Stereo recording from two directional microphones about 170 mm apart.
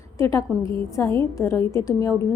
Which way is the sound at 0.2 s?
20° left (ahead or behind).